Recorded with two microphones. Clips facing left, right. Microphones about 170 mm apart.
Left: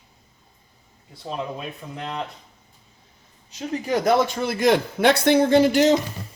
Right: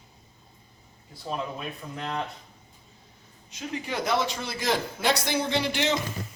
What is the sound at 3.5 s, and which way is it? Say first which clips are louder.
Speech: left 8 dB; 35° left (ahead or behind).